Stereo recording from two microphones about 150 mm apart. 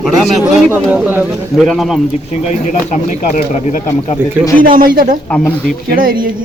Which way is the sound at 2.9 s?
55° left (ahead or behind).